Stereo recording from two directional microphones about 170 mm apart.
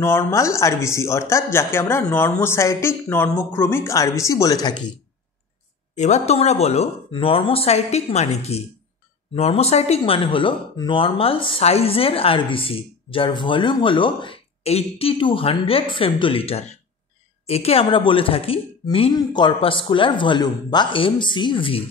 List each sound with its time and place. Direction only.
0.0 s a woman's voice: 15° left (ahead or behind)
5.9 s speech: 40° left (ahead or behind)